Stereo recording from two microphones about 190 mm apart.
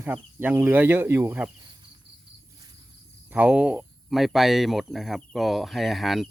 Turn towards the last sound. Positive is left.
turn(degrees=0)  # may be behind; listen again after turning